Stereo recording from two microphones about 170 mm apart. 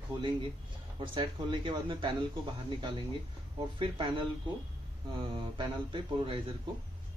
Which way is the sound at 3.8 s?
25° right (ahead or behind).